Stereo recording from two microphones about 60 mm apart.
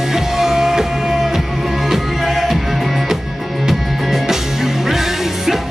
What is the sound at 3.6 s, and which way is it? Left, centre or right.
Music, centre.